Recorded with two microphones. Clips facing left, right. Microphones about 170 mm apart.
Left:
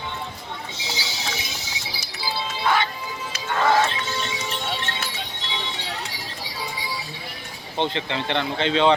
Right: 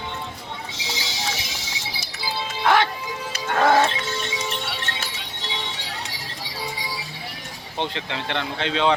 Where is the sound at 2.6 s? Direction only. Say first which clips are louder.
Right 4 dB; 70° right (ahead or behind).